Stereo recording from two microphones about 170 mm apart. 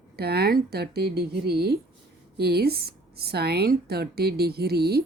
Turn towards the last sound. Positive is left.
turn(degrees=-70)  # may be behind; listen again after turning